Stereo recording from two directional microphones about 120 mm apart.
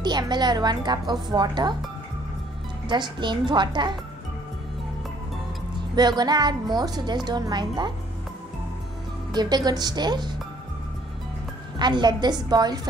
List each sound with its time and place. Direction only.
0.0 s a woman's voice: 35° right (ahead or behind)
2.9 s a woman's voice: 40° right (ahead or behind)
5.9 s a woman's voice: 35° right (ahead or behind)
9.3 s a woman's voice: 35° right (ahead or behind)
11.8 s a woman's voice: 40° right (ahead or behind)